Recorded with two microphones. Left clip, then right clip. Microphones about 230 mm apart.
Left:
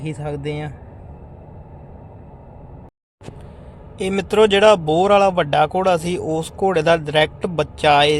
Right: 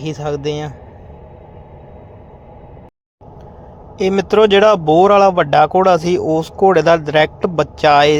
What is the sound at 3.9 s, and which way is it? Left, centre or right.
Speech, centre.